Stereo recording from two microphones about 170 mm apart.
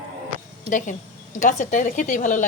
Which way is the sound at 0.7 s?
50° left (ahead or behind).